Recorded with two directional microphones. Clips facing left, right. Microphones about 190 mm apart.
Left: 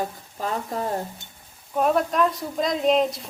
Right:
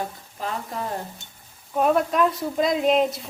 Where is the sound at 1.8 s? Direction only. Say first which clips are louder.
Right 1 dB; centre (ahead or behind).